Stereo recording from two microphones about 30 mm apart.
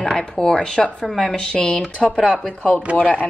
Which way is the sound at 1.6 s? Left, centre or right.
Centre.